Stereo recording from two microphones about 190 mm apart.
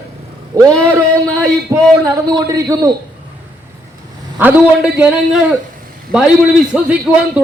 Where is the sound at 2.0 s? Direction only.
20° right (ahead or behind).